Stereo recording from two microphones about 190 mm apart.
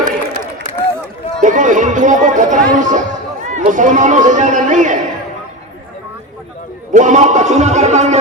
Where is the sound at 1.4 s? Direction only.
40° right (ahead or behind).